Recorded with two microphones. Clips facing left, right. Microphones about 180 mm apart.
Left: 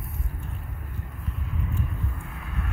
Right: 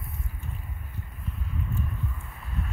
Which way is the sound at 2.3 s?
65° left (ahead or behind).